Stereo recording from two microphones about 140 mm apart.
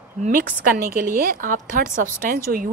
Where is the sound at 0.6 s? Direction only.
80° right.